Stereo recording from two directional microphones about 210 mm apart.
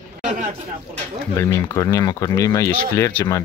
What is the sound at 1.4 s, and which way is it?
Speech, 15° left (ahead or behind).